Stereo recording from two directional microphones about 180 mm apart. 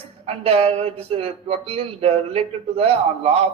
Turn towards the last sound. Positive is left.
turn(degrees=-35)  # may be behind; listen again after turning